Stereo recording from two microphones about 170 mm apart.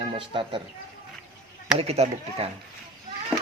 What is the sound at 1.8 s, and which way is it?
Speech, 40° right (ahead or behind).